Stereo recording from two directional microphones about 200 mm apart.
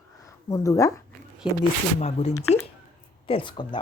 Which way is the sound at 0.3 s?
15° left (ahead or behind).